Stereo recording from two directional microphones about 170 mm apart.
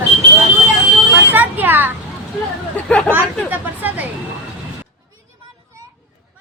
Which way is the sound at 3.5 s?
10° right (ahead or behind).